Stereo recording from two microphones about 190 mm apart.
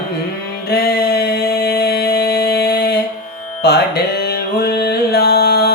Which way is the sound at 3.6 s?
60° left (ahead or behind).